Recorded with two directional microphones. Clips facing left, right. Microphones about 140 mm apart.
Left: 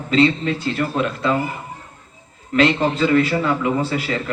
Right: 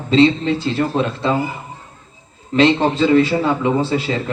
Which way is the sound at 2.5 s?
25° right (ahead or behind).